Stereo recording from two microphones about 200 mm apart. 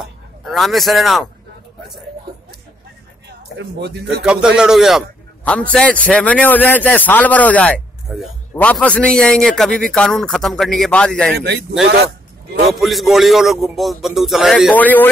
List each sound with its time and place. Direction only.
0.0 s a man's voice: centre (ahead or behind)
3.5 s speech: 55° right (ahead or behind)
4.2 s a man's voice: 5° right (ahead or behind)
8.1 s a man's voice: 5° right (ahead or behind)
8.5 s a man's voice: 5° left (ahead or behind)
11.3 s a man's voice: 55° right (ahead or behind)
12.6 s a man's voice: centre (ahead or behind)